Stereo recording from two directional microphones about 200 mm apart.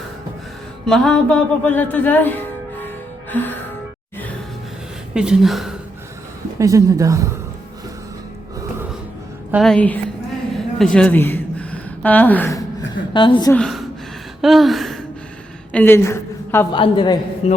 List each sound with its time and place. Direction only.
0.9 s speech: 5° left (ahead or behind)
2.8 s music: 10° left (ahead or behind)
5.1 s a woman's voice: 5° right (ahead or behind)
6.6 s speech: 15° right (ahead or behind)
9.5 s a woman's voice: centre (ahead or behind)
10.8 s a sound: 5° left (ahead or behind)
12.9 s a sound: 25° left (ahead or behind)
13.5 s a woman's voice: 5° left (ahead or behind)
14.4 s gasp: centre (ahead or behind)
15.7 s a woman's voice: 10° left (ahead or behind)
16.7 s a woman's voice: 25° left (ahead or behind)